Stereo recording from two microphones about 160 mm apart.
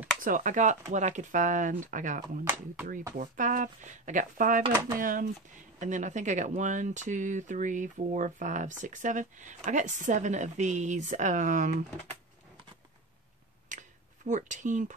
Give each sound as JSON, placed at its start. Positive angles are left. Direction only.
{"t": 0.2, "sound": "speech", "side_deg": -55}
{"t": 2.4, "sound": "speech", "side_deg": -15}
{"t": 3.2, "sound": "speech", "side_deg": -55}
{"t": 13.7, "sound": "a sound", "side_deg": -50}